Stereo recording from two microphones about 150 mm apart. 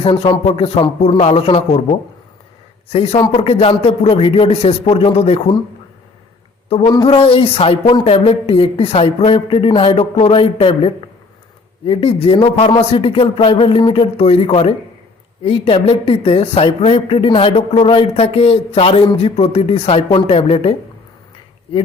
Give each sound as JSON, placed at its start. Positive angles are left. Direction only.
{"t": 0.0, "sound": "a woman's voice", "side_deg": 35}
{"t": 2.9, "sound": "a woman's voice", "side_deg": 40}
{"t": 6.8, "sound": "speech", "side_deg": 25}
{"t": 7.1, "sound": "a woman's voice", "side_deg": 40}